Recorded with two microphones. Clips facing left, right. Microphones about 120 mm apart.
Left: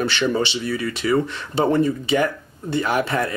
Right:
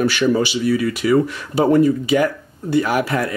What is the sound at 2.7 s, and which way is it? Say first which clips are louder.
Speech: right 3 dB; 25° left (ahead or behind).